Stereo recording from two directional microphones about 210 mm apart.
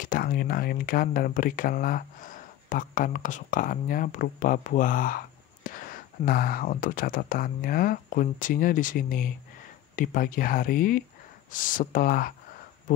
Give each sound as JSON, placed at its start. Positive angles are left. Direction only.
{"t": 0.0, "sound": "speech", "side_deg": 45}